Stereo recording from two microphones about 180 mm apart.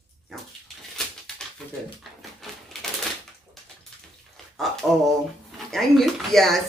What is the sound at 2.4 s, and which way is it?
Typewriter, centre (ahead or behind).